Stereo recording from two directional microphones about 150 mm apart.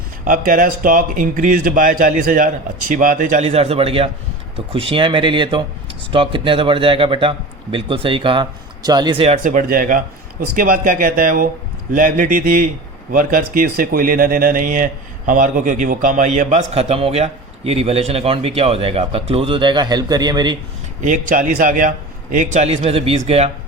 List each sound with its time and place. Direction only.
0.3 s a man's voice: 65° right (ahead or behind); by 9.3 s 35° right (ahead or behind)
9.4 s a man's voice: 60° right (ahead or behind); by 20.6 s 30° right (ahead or behind)
21.0 s speech: 60° right (ahead or behind); by 23.5 s 45° right (ahead or behind)